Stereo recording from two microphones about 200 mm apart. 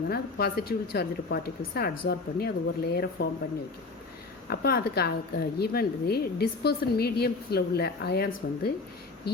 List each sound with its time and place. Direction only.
0.1 s a woman's voice: 50° left (ahead or behind)
4.4 s a woman's voice: 50° left (ahead or behind)